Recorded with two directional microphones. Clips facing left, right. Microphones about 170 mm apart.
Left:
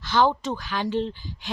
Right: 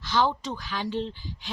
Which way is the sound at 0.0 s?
55° left (ahead or behind).